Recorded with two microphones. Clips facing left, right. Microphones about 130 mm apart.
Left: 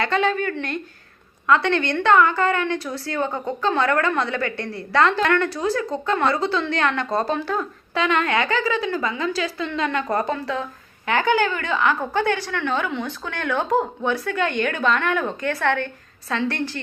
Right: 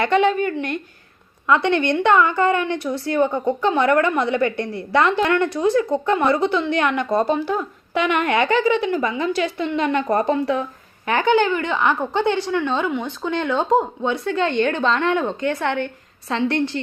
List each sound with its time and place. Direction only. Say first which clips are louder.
0.0 s a woman's voice: right 4 dB; 20° right (ahead or behind)